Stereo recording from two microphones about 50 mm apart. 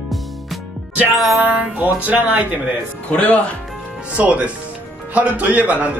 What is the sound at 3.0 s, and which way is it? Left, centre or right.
Speech, left.